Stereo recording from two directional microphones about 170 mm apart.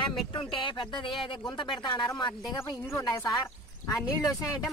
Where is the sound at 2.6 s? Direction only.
15° left (ahead or behind).